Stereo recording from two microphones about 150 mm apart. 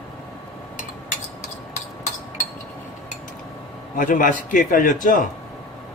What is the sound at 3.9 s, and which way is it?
A man's voice, 65° left (ahead or behind).